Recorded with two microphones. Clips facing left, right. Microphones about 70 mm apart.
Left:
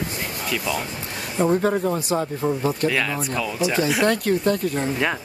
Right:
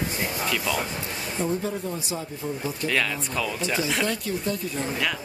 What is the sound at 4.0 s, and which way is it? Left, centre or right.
Speech, left.